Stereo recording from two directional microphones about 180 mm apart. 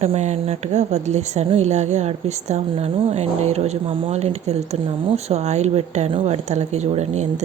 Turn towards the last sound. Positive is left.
turn(degrees=-40)  # may be behind; listen again after turning